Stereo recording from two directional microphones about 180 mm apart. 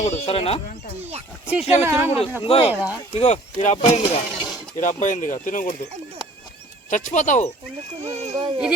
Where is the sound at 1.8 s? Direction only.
15° right (ahead or behind).